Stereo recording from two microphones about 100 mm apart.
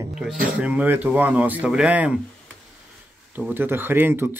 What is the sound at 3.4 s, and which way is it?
Speech, 20° right (ahead or behind).